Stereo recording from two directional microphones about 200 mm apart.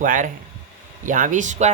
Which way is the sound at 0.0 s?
40° right (ahead or behind).